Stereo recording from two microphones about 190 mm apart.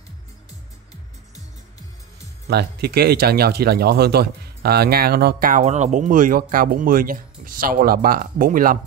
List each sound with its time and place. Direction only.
2.4 s speech: 55° right (ahead or behind)